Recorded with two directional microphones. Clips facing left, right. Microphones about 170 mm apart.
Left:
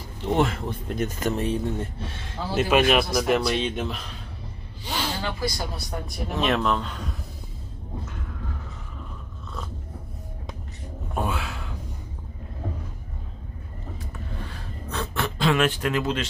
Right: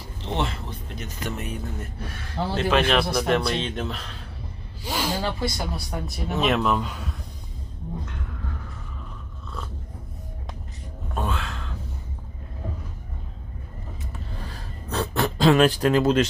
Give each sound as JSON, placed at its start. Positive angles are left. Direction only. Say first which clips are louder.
{"t": 0.2, "sound": "speech", "louder": "left 5 dB", "side_deg": 50}
{"t": 1.3, "sound": "a man's voice", "louder": "left 7 dB", "side_deg": 30}
{"t": 2.7, "sound": "speech", "louder": "left 2 dB", "side_deg": 10}
{"t": 4.8, "sound": "snake", "louder": "right 2 dB", "side_deg": -10}
{"t": 5.2, "sound": "speech", "louder": "right 2 dB", "side_deg": -25}
{"t": 5.9, "sound": "speech", "louder": "right 1 dB", "side_deg": 0}
{"t": 11.1, "sound": "a sound", "louder": "left 1 dB", "side_deg": 10}
{"t": 14.5, "sound": "a sound", "louder": "right 3 dB", "side_deg": -35}